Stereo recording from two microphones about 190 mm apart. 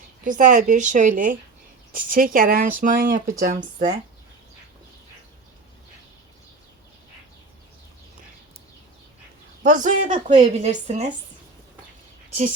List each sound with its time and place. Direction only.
0.3 s speech: 45° right (ahead or behind)
9.6 s speech: 45° right (ahead or behind)